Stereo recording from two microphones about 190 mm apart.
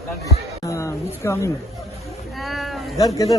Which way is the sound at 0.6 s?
15° left (ahead or behind).